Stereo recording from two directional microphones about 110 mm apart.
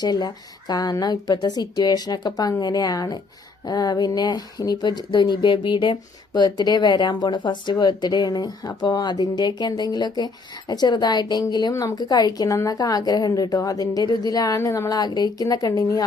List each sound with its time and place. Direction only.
0.0 s speech: 35° left (ahead or behind)
11.7 s speech: 30° left (ahead or behind)